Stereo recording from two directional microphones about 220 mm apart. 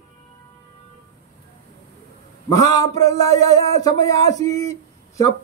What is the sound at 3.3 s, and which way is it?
Speech, 30° right (ahead or behind).